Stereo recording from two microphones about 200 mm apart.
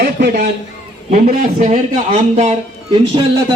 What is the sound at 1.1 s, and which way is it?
A man's voice, 40° right (ahead or behind).